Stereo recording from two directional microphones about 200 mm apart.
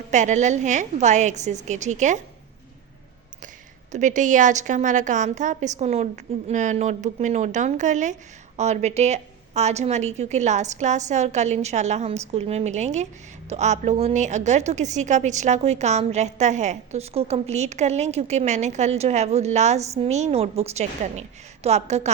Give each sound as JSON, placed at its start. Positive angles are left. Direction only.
{"t": 0.1, "sound": "a woman's voice", "side_deg": -35}
{"t": 3.9, "sound": "a woman's voice", "side_deg": -40}